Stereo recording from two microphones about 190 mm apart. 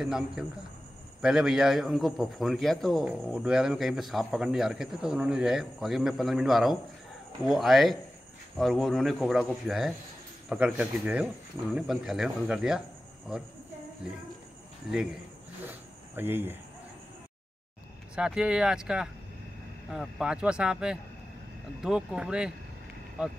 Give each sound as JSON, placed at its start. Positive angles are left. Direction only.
{"t": 0.0, "sound": "a man's voice", "side_deg": 0}
{"t": 16.2, "sound": "speech", "side_deg": -10}
{"t": 18.1, "sound": "a man's voice", "side_deg": -5}